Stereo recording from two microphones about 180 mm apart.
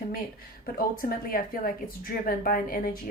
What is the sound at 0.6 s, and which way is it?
Speech, 50° left (ahead or behind).